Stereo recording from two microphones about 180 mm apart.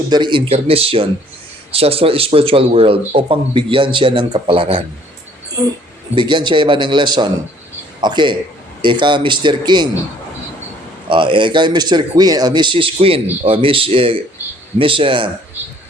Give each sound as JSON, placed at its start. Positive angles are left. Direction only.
{"t": 0.1, "sound": "a man's voice", "side_deg": -25}
{"t": 6.1, "sound": "a man's voice", "side_deg": -25}
{"t": 11.1, "sound": "a man's voice", "side_deg": -30}